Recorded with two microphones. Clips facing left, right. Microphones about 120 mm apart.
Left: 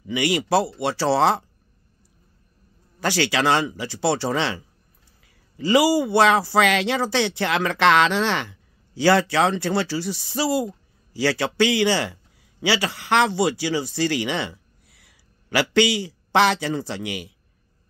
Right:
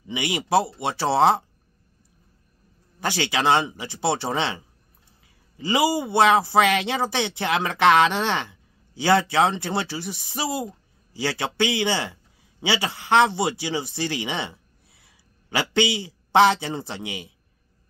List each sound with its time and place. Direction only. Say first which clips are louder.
0.0 s speech: left 5 dB; 20° right (ahead or behind)
3.0 s speech: left 3 dB; 20° right (ahead or behind)